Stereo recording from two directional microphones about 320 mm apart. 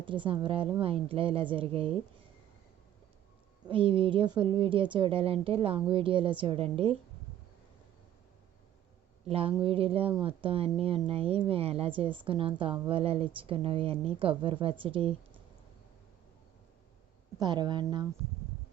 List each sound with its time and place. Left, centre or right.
0.0 s speech: centre
3.7 s speech: centre
9.2 s speech: centre
17.4 s speech: centre